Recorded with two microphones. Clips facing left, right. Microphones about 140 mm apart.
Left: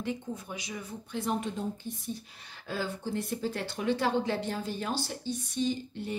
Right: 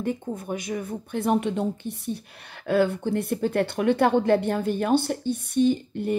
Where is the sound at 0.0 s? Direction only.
50° right (ahead or behind).